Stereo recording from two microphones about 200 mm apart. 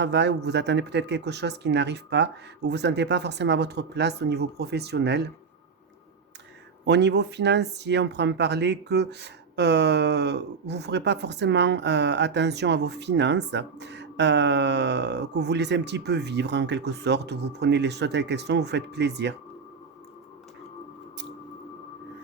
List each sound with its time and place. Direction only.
0.0 s speech: 60° right (ahead or behind)
6.8 s speech: 60° right (ahead or behind)